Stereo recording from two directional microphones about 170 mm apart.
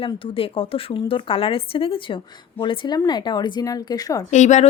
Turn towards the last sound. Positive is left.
turn(degrees=45)  # may be behind; listen again after turning